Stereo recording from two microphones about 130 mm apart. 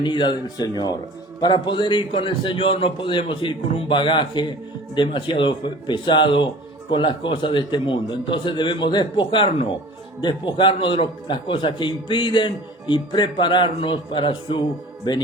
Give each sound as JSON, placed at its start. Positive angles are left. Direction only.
{"t": 0.0, "sound": "a man's voice", "side_deg": 35}